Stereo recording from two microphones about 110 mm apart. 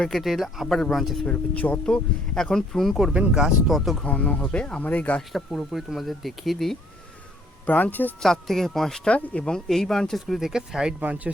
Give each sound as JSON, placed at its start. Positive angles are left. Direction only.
{"t": 0.0, "sound": "speech", "side_deg": 0}
{"t": 1.3, "sound": "speech", "side_deg": 15}
{"t": 5.3, "sound": "speech", "side_deg": 0}
{"t": 7.7, "sound": "speech", "side_deg": 15}
{"t": 8.2, "sound": "speech", "side_deg": 5}